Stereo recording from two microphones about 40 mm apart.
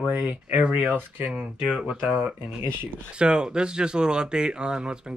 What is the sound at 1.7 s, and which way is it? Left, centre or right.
Speech, centre.